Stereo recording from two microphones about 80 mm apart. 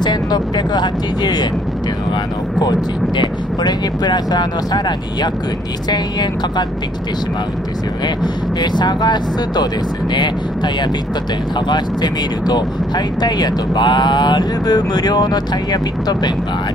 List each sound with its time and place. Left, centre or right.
0.0 s speech: left
2.6 s speech: left
8.2 s speech: left